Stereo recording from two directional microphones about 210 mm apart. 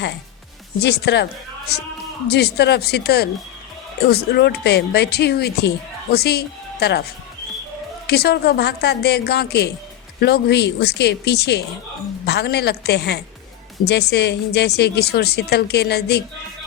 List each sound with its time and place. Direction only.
0.8 s speech: 50° left (ahead or behind)
8.0 s speech: 50° left (ahead or behind)